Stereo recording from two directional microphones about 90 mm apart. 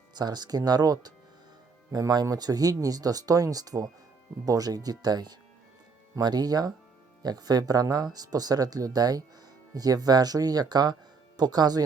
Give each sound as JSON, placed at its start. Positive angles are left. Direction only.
{"t": 0.1, "sound": "speech", "side_deg": -50}